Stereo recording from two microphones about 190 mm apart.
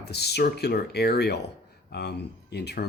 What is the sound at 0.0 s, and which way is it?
Speech, 60° left (ahead or behind).